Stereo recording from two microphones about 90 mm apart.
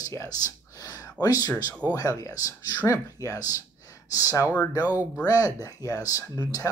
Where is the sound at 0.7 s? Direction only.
35° left (ahead or behind).